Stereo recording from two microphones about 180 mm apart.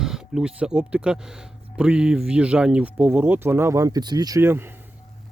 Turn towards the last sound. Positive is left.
turn(degrees=-10)  # may be behind; listen again after turning